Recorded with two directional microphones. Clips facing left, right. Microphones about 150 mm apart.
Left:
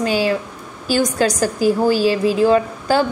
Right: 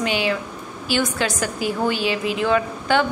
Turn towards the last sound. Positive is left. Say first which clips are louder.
# left 3 dB
turn(degrees=35)  # may be behind; listen again after turning